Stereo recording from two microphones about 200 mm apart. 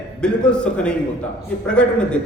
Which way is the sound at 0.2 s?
5° left (ahead or behind).